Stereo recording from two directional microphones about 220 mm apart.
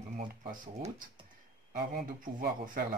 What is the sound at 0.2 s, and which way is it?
Speech, 35° right (ahead or behind).